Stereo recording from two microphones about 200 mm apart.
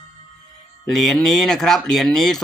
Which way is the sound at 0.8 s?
Centre (ahead or behind).